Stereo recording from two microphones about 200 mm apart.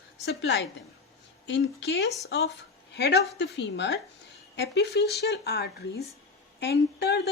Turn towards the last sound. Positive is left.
turn(degrees=55)  # may be behind; listen again after turning